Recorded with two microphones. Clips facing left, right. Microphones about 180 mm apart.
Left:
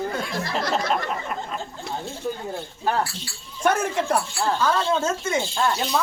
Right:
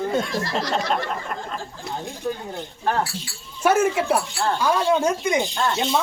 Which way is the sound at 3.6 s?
5° right (ahead or behind).